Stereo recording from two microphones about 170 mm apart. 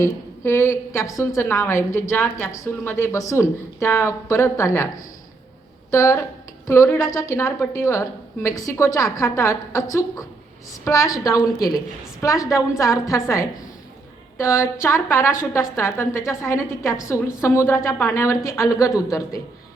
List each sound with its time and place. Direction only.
0.0 s a woman's voice: 15° left (ahead or behind)
5.9 s a woman's voice: 20° left (ahead or behind)